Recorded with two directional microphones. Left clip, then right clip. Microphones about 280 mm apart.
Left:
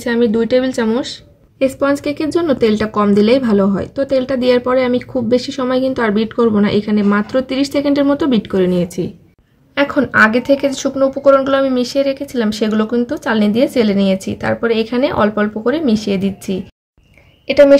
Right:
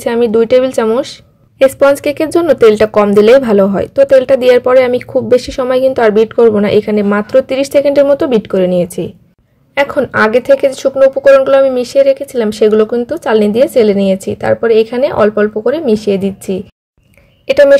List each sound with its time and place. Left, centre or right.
0.0 s a woman's voice: right